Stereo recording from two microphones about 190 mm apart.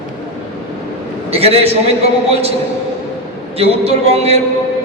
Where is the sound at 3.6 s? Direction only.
35° right (ahead or behind).